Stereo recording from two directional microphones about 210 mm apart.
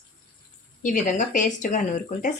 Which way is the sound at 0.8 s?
35° left (ahead or behind).